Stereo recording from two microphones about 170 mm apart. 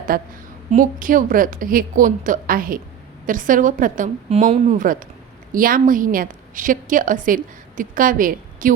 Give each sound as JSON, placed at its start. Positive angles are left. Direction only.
{"t": 0.1, "sound": "a woman's voice", "side_deg": -60}